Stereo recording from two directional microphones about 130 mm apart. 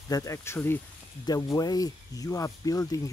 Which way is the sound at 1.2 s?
30° left (ahead or behind).